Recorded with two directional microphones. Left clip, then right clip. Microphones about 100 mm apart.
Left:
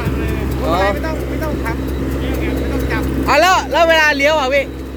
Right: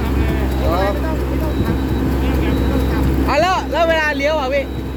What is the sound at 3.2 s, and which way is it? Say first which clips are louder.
Speech: left 5 dB; 50° left (ahead or behind).